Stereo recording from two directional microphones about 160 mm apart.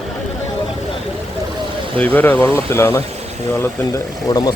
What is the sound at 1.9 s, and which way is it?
Speech, 10° left (ahead or behind).